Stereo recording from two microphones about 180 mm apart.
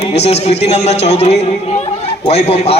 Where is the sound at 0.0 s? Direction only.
35° left (ahead or behind).